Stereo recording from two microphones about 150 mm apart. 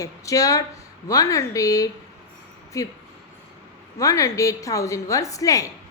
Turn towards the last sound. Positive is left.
turn(degrees=20)  # may be behind; listen again after turning